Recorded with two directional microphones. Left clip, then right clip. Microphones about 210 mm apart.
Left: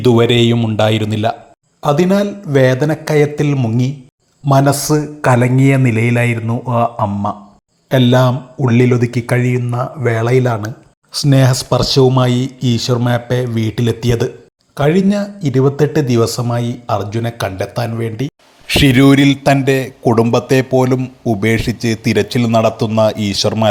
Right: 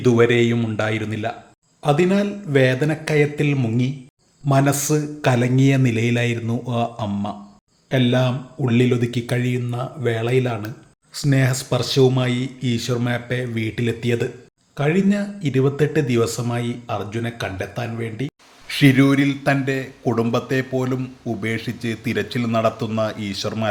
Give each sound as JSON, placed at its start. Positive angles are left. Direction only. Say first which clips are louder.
{"t": 0.0, "sound": "speech", "louder": "left 5 dB", "side_deg": 25}
{"t": 4.8, "sound": "speech", "louder": "left 6 dB", "side_deg": 0}
{"t": 5.2, "sound": "speech", "louder": "left 7 dB", "side_deg": 10}
{"t": 7.9, "sound": "speech", "louder": "left 8 dB", "side_deg": 25}
{"t": 8.6, "sound": "speech", "louder": "left 6 dB", "side_deg": 0}
{"t": 10.4, "sound": "speech", "louder": "left 8 dB", "side_deg": 20}